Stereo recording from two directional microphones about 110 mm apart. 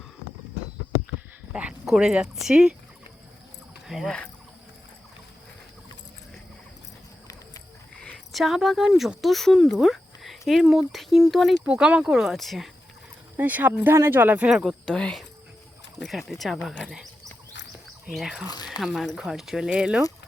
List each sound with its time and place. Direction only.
1.5 s speech: 10° right (ahead or behind)
3.8 s speech: 5° right (ahead or behind)
7.9 s speech: 5° left (ahead or behind)
11.6 s speech: 10° right (ahead or behind)
13.3 s speech: 15° right (ahead or behind)
14.8 s speech: 5° left (ahead or behind)
18.1 s speech: 5° right (ahead or behind)
18.5 s speech: 40° left (ahead or behind)
18.8 s speech: centre (ahead or behind)